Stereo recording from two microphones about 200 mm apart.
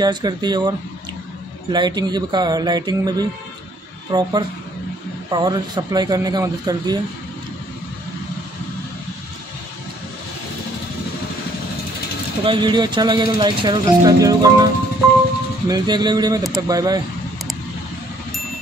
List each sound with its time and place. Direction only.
0.0 s speech: 20° right (ahead or behind)
12.4 s speech: 25° right (ahead or behind)
15.7 s speech: 20° right (ahead or behind)